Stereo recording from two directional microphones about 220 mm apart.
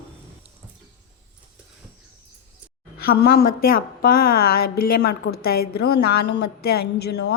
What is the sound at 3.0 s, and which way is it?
A woman's voice, 45° left (ahead or behind).